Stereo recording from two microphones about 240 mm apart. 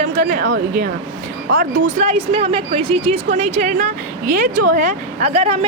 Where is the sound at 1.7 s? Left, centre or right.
Right.